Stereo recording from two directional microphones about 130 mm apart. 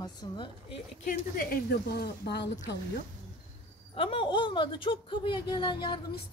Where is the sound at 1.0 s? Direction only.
90° left.